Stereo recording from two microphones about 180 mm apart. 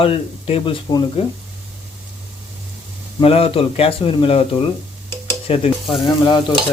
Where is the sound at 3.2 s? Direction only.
30° left (ahead or behind).